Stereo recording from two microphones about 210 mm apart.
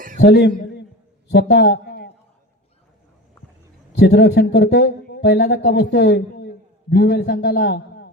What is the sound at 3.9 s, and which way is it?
Speech, 50° left (ahead or behind).